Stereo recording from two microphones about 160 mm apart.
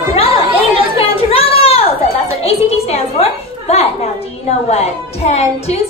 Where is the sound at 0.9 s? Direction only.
35° left (ahead or behind).